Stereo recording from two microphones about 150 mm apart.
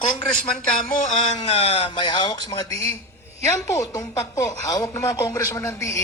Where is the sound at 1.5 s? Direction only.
40° left (ahead or behind).